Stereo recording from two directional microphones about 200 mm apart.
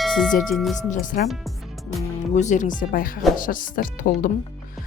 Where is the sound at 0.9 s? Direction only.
40° left (ahead or behind).